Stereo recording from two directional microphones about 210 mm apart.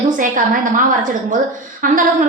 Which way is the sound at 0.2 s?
40° right (ahead or behind).